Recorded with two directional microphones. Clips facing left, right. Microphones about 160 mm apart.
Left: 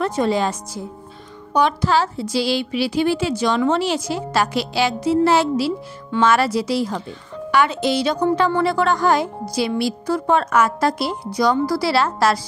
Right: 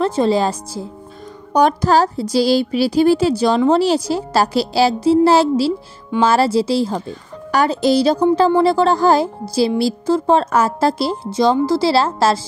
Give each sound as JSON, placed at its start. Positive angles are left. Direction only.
{"t": 0.0, "sound": "a woman's voice", "side_deg": -30}